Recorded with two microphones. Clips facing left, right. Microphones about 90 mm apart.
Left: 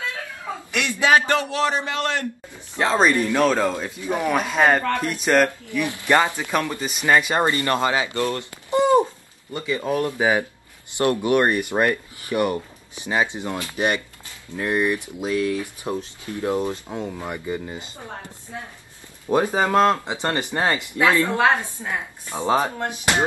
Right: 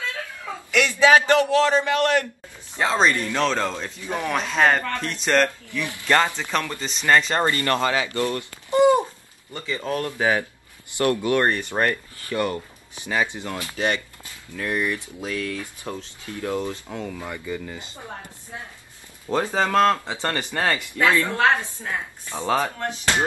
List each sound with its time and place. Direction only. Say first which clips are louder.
0.7 s a man's voice: right 3 dB; 20° left (ahead or behind)
2.8 s speech: left 2 dB; 5° left (ahead or behind)
5.7 s speech: left 2 dB; 20° left (ahead or behind)
8.4 s a sound: right 1 dB; 20° left (ahead or behind)
9.5 s speech: left 3 dB; 15° left (ahead or behind)
19.2 s speech: left 3 dB; 15° left (ahead or behind)